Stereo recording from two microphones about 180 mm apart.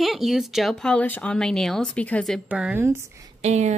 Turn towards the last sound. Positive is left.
turn(degrees=-40)  # may be behind; listen again after turning